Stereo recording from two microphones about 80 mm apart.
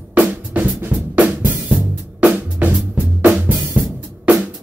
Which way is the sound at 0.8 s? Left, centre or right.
Right.